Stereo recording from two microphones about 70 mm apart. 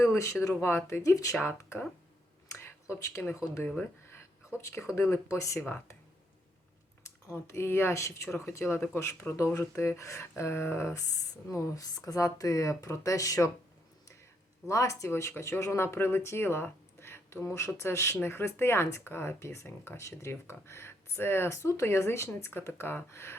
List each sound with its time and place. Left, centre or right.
0.0 s speech: left
1.4 s speech: left
7.3 s speech: left
11.4 s speech: left
14.7 s speech: left